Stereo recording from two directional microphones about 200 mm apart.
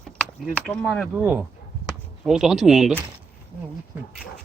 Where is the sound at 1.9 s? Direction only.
Centre (ahead or behind).